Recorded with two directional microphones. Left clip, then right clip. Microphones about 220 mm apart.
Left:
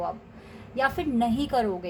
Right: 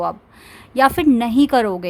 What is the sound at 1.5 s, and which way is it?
Speech, 55° right (ahead or behind).